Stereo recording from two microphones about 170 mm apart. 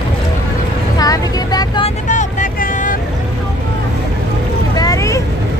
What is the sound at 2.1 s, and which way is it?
Vehicle, 45° left (ahead or behind).